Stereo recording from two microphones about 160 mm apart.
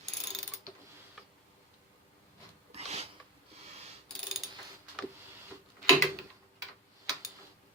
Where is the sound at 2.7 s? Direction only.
40° right (ahead or behind).